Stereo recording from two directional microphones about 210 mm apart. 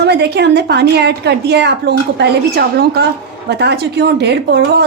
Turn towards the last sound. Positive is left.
turn(degrees=-50)  # may be behind; listen again after turning